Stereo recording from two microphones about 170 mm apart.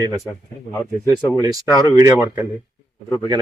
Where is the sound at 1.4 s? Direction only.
20° right (ahead or behind).